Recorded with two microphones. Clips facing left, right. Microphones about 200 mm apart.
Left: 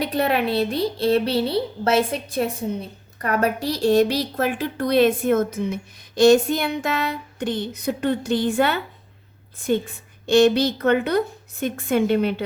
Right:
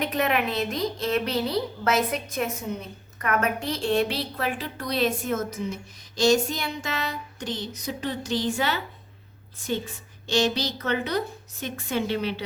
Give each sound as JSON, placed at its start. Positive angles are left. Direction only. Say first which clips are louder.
{"t": 0.0, "sound": "a woman's voice", "louder": "left 4 dB", "side_deg": 35}